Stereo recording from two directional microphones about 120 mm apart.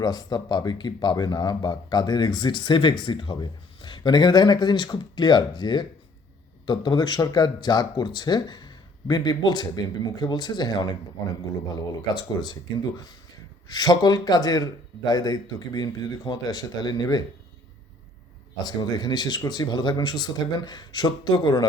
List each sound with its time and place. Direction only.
0.0 s speech: 30° left (ahead or behind)
13.7 s speech: 30° left (ahead or behind)
18.5 s speech: 35° left (ahead or behind)